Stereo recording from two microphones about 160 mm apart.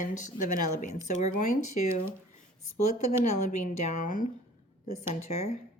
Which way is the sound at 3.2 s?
45° left (ahead or behind).